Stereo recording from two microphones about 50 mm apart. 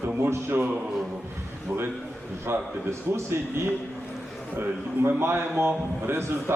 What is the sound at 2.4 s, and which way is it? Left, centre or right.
Speech, right.